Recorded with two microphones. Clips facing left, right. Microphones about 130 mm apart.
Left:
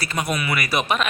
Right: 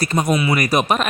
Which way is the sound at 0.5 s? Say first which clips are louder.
Right 5 dB; 40° right (ahead or behind).